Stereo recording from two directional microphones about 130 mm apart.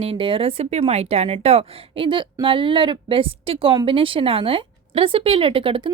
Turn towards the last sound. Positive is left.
turn(degrees=-45)  # may be behind; listen again after turning